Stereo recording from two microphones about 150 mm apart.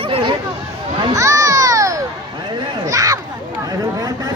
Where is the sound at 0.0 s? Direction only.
35° right (ahead or behind).